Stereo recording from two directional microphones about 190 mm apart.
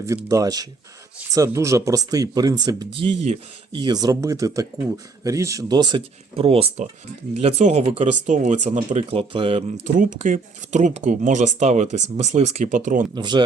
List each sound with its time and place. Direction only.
0.0 s speech: 15° right (ahead or behind)
9.8 s speech: 40° right (ahead or behind)
13.1 s speech: 25° right (ahead or behind)